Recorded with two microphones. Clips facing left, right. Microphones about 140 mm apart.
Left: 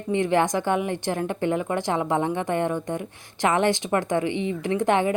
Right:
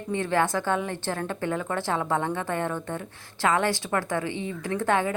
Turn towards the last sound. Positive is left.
turn(degrees=20)  # may be behind; listen again after turning